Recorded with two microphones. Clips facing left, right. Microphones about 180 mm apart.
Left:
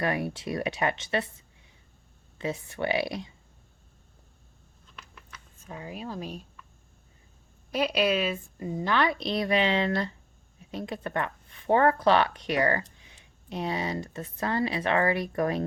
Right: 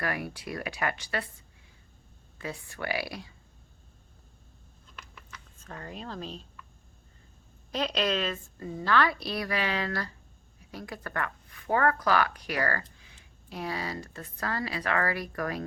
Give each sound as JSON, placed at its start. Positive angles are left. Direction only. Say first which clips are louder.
{"t": 0.0, "sound": "speech", "louder": "left 5 dB", "side_deg": 25}
{"t": 2.4, "sound": "speech", "louder": "left 6 dB", "side_deg": 20}
{"t": 4.9, "sound": "a sound", "louder": "even", "side_deg": 10}
{"t": 7.7, "sound": "speech", "louder": "left 4 dB", "side_deg": 10}